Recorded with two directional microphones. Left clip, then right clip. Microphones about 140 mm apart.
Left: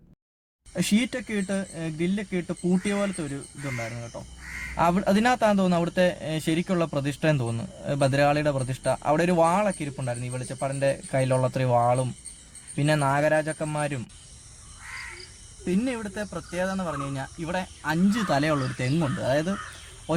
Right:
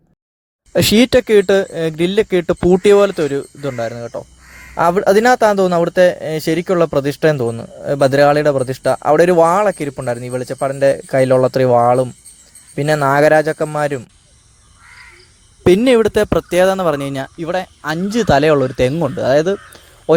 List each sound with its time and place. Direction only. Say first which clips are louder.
0.7 s speech: right 16 dB; 50° right (ahead or behind)
15.6 s speech: right 19 dB; 55° right (ahead or behind)